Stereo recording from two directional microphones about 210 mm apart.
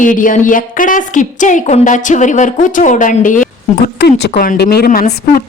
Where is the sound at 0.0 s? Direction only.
40° left (ahead or behind).